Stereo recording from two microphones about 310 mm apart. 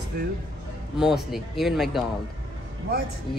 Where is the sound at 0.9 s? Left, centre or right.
Centre.